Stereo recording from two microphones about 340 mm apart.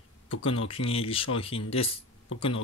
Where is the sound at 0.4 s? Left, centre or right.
Centre.